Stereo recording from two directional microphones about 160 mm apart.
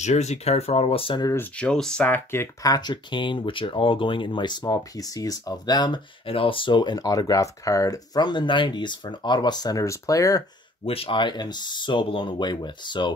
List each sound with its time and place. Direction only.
0.0 s speech: 45° left (ahead or behind)
1.3 s speech: 10° left (ahead or behind)
10.9 s speech: 35° left (ahead or behind)